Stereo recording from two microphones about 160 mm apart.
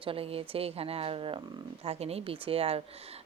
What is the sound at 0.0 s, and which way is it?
A woman's voice, 35° right (ahead or behind).